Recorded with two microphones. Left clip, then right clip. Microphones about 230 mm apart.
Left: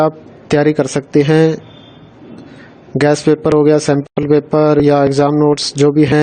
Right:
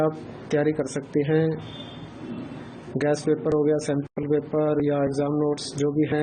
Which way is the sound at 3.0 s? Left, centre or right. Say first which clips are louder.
Left 11 dB; left.